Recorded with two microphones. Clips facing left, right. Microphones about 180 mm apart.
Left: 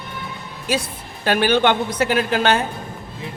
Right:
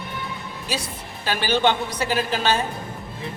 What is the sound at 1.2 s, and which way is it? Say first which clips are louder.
A woman's voice: left 4 dB; 55° left (ahead or behind).